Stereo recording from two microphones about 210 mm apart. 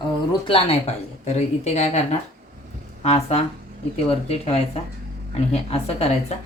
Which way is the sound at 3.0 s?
30° left (ahead or behind).